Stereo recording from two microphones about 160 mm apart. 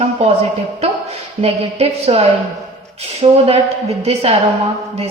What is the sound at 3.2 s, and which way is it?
A woman's voice, 35° right (ahead or behind).